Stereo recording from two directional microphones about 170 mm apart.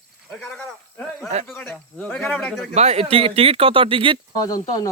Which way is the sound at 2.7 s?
40° right (ahead or behind).